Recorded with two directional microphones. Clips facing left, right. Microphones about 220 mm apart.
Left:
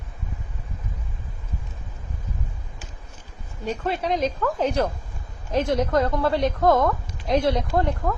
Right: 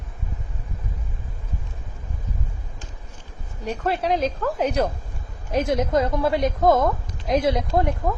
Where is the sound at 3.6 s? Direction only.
Centre (ahead or behind); by 8.1 s 15° right (ahead or behind).